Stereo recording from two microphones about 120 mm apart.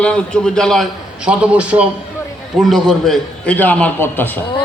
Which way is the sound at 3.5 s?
15° left (ahead or behind).